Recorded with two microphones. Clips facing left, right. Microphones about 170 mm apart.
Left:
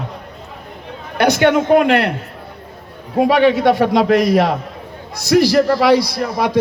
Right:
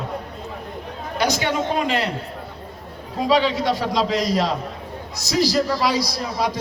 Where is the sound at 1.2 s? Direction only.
60° left (ahead or behind).